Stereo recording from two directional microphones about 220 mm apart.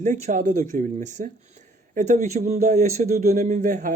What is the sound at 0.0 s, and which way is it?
Speech, 35° right (ahead or behind).